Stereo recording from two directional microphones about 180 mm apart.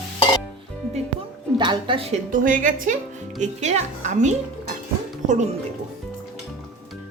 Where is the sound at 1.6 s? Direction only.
25° right (ahead or behind).